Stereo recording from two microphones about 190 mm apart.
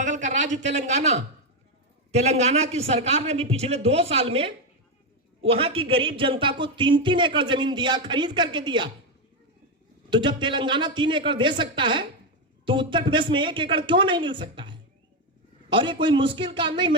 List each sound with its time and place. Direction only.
0.0 s a sound: 40° right (ahead or behind)
2.1 s a man's voice: 35° right (ahead or behind)
10.1 s speech: 25° right (ahead or behind)